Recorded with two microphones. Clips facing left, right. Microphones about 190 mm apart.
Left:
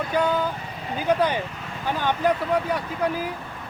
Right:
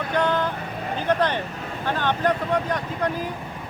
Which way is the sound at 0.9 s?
10° left (ahead or behind).